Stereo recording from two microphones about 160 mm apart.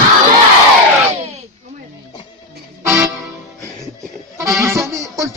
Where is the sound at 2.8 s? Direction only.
20° right (ahead or behind).